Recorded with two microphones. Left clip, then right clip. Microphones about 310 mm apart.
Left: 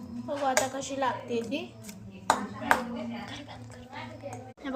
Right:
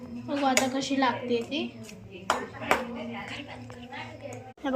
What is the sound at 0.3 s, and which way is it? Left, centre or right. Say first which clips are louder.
Speech: right 2 dB; left.